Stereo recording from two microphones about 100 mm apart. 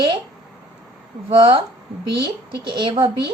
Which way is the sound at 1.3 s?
60° right (ahead or behind).